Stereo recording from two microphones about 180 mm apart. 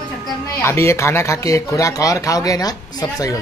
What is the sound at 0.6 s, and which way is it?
Speech, 15° left (ahead or behind).